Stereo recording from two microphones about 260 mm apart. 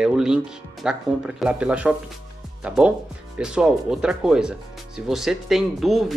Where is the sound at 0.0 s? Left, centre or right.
Centre.